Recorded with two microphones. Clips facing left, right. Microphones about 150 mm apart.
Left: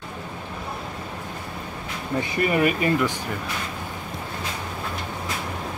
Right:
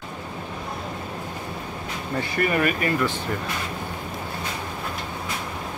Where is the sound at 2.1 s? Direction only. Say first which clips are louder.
Left 1 dB; 20° left (ahead or behind).